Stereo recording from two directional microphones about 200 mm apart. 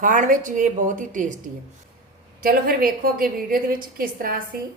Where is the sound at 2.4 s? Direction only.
45° right (ahead or behind).